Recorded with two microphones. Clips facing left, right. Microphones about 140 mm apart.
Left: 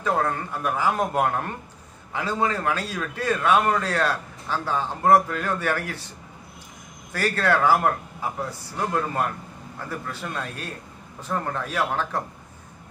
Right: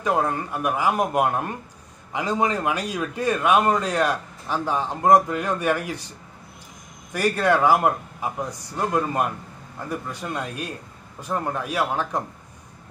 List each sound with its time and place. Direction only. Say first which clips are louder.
0.0 s a man's voice: right 1 dB; 15° right (ahead or behind)
7.1 s a man's voice: right 2 dB; 15° right (ahead or behind)